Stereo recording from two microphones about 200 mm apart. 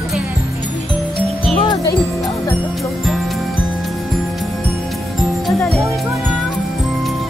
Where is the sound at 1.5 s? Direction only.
20° left (ahead or behind).